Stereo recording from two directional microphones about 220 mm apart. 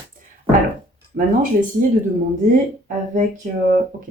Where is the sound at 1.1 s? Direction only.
45° right (ahead or behind).